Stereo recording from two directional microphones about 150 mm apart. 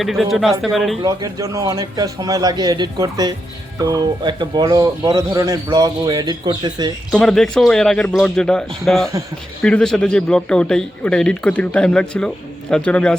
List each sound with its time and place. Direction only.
0.0 s a man's voice: centre (ahead or behind)
1.0 s speech: 20° right (ahead or behind)
7.1 s a man's voice: 5° left (ahead or behind)